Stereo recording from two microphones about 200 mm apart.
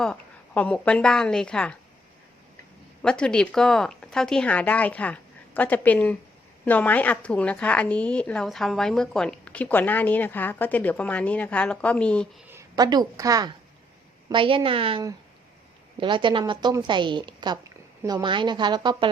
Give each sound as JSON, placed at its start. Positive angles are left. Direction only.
{"t": 0.0, "sound": "a woman's voice", "side_deg": 5}
{"t": 3.0, "sound": "a woman's voice", "side_deg": 5}
{"t": 12.5, "sound": "a woman's voice", "side_deg": -15}